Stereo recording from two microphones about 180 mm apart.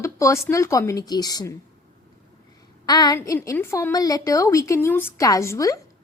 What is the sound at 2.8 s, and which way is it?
A woman's voice, 20° left (ahead or behind).